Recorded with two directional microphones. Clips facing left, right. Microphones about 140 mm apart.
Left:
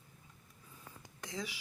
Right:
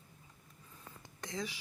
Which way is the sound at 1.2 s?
5° left (ahead or behind).